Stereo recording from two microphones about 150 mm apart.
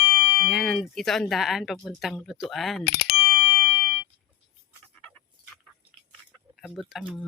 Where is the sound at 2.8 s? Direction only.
90° left.